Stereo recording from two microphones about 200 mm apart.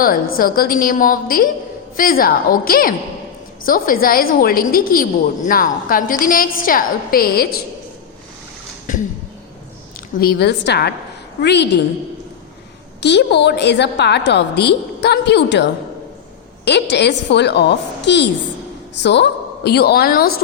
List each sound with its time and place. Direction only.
0.3 s a woman's voice: 45° left (ahead or behind)
10.2 s a woman's voice: 50° left (ahead or behind)
13.0 s a woman's voice: 60° left (ahead or behind)